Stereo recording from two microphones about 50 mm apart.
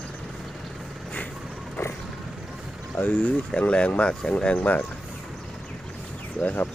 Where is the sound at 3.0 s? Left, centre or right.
Left.